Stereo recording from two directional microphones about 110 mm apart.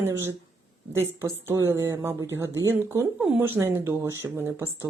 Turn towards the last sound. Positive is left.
turn(degrees=-25)  # may be behind; listen again after turning